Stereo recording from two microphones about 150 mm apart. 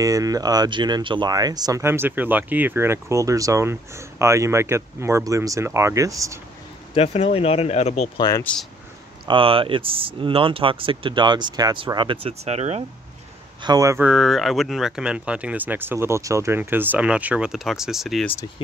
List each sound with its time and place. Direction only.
0.0 s speech: 20° right (ahead or behind)
7.0 s speech: 45° left (ahead or behind)
8.2 s speech: 25° left (ahead or behind)
9.3 s speech: 35° right (ahead or behind)
13.6 s speech: 25° right (ahead or behind)
14.0 s speech: centre (ahead or behind)